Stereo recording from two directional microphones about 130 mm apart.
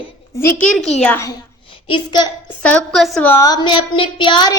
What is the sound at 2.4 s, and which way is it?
Speech, 10° left (ahead or behind).